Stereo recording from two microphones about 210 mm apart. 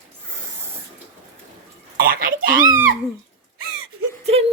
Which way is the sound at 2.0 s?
45° right (ahead or behind).